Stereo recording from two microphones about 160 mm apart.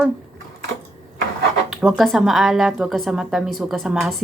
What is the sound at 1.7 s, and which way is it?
A woman's voice, centre (ahead or behind).